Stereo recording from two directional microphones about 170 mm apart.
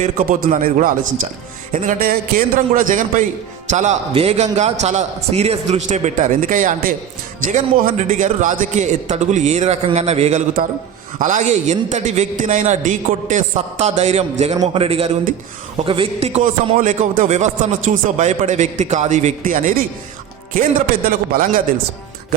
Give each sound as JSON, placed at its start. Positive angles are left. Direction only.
{"t": 0.0, "sound": "a man's voice", "side_deg": -55}
{"t": 16.4, "sound": "speech", "side_deg": -50}